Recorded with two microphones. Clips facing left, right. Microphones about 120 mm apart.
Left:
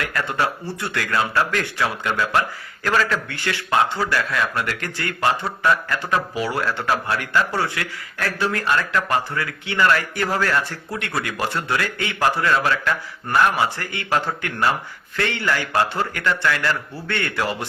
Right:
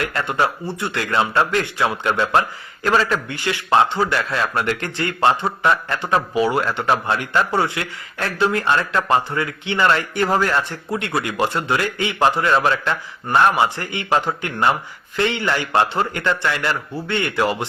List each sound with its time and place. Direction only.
0.0 s a man's voice: 25° right (ahead or behind)